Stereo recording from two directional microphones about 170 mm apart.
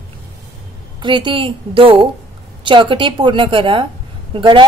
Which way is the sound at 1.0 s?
30° right (ahead or behind).